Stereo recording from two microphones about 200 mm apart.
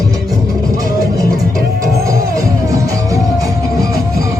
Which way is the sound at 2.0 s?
15° right (ahead or behind).